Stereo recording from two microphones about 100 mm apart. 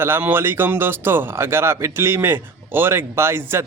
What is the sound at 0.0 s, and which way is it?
Speech, 20° right (ahead or behind).